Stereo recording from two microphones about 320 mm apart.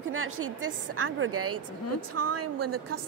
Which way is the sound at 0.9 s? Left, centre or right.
Right.